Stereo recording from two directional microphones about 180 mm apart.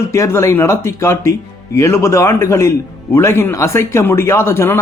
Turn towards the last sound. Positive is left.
turn(degrees=15)  # may be behind; listen again after turning